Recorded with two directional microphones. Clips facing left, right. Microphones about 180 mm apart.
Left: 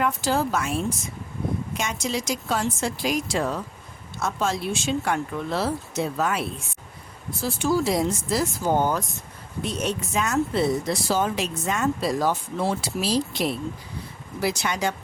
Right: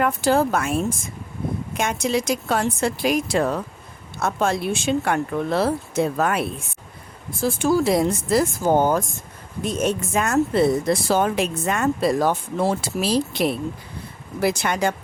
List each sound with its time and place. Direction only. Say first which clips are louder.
0.0 s speech: right 5 dB; 55° right (ahead or behind)